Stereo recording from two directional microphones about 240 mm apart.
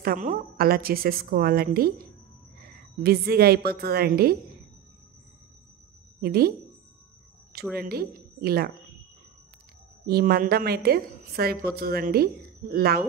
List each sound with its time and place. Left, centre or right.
0.0 s a woman's voice: right
6.2 s a woman's voice: right
7.7 s a woman's voice: right
10.0 s a woman's voice: right